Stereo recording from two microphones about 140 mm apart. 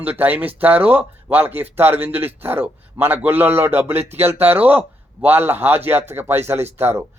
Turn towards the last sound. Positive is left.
turn(degrees=-15)  # may be behind; listen again after turning